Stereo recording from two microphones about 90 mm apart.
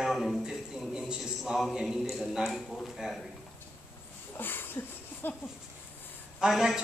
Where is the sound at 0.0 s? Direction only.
Centre (ahead or behind).